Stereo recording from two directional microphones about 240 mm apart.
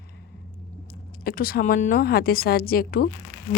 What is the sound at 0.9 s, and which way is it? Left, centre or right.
Speech, left.